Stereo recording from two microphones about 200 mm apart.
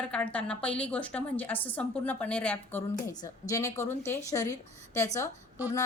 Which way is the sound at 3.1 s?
20° left (ahead or behind).